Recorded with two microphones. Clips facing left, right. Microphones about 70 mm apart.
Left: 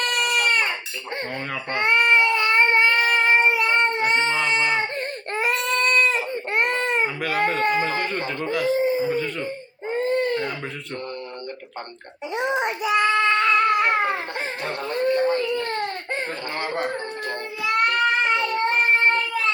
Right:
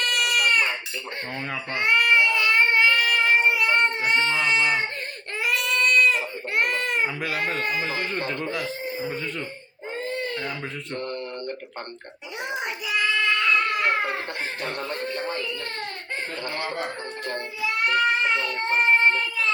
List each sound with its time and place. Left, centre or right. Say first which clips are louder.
0.0 s baby cry: left 1 dB; left
1.7 s child singing: left 2 dB; left
5.3 s baby cry: left 2 dB; left
7.3 s speech: left 5 dB; left
8.2 s speech: left 1 dB; left
8.6 s speech: left 11 dB; left
9.0 s a sound: left 6 dB; centre
9.9 s baby cry: left 8 dB; left
12.4 s child singing: left 7 dB; left
14.6 s speech: left 8 dB; left
17.7 s a sound: left 2 dB; left